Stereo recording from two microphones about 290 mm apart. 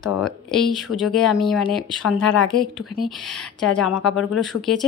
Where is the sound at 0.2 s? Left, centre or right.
Centre.